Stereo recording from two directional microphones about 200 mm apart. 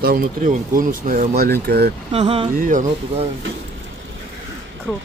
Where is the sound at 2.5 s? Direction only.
45° right (ahead or behind).